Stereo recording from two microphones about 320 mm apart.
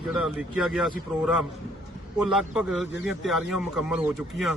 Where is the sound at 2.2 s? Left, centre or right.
Centre.